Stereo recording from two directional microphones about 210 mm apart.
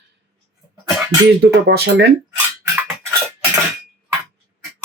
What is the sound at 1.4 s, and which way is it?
Speech, 50° right (ahead or behind).